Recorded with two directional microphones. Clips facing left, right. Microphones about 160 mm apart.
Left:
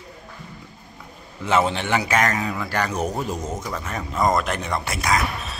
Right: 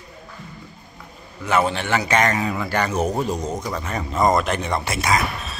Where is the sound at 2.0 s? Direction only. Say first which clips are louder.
Right 2 dB; centre (ahead or behind).